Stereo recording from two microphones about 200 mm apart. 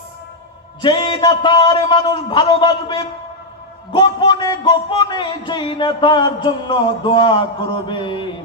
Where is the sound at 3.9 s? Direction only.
20° left (ahead or behind).